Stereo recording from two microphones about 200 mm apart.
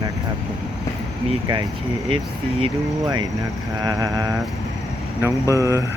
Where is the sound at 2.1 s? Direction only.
25° right (ahead or behind).